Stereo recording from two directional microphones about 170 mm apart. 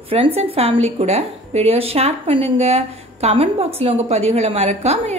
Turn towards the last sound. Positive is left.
turn(degrees=-40)  # may be behind; listen again after turning